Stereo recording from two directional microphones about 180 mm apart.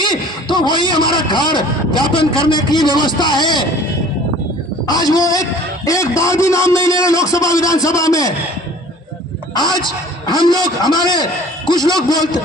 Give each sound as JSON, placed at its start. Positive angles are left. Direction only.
{"t": 0.5, "sound": "a man's voice", "side_deg": 25}
{"t": 4.8, "sound": "a man's voice", "side_deg": 20}
{"t": 10.2, "sound": "a man's voice", "side_deg": 25}